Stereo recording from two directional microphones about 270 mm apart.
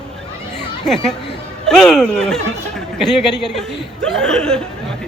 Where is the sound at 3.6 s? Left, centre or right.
Centre.